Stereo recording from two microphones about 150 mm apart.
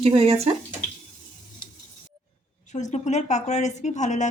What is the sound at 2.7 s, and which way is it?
A woman's voice, 50° left (ahead or behind).